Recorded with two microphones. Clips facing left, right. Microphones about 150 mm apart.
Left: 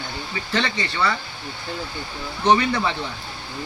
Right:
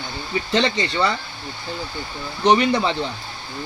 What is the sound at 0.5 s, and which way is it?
Speech, 20° right (ahead or behind).